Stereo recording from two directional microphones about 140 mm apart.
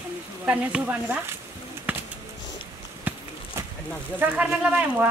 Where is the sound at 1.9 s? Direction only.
10° right (ahead or behind).